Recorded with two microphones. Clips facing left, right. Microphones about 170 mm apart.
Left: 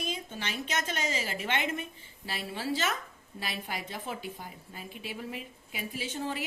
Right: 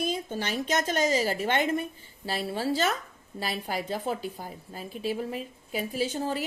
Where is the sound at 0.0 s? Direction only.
40° right (ahead or behind).